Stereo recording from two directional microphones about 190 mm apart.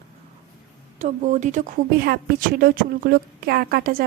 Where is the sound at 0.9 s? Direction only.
40° right (ahead or behind).